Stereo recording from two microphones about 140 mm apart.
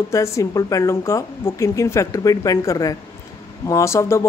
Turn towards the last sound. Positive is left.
turn(degrees=20)  # may be behind; listen again after turning